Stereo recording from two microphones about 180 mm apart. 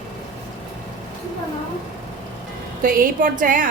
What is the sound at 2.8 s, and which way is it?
Speech, 50° right (ahead or behind).